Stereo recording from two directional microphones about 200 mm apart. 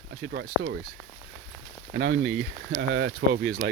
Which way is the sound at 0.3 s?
60° right (ahead or behind).